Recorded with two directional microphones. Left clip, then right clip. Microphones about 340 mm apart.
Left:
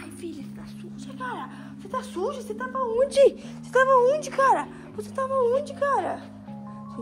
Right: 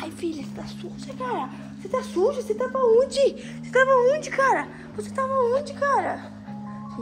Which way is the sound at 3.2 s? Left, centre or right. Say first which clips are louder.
Left 3 dB; centre.